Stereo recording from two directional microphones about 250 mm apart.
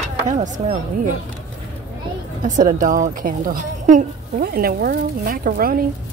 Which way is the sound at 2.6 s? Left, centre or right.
Right.